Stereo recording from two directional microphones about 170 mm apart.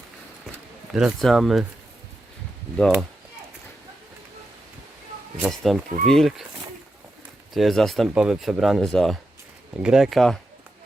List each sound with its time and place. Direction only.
0.9 s speech: centre (ahead or behind)
5.4 s speech: centre (ahead or behind)
7.5 s speech: centre (ahead or behind)